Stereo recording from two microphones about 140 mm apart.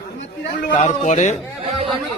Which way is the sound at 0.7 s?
65° left (ahead or behind).